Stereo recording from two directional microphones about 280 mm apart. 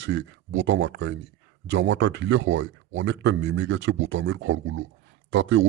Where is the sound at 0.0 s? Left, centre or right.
Right.